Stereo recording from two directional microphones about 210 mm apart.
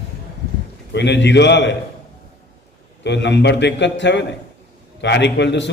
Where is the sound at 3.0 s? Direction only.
55° left (ahead or behind).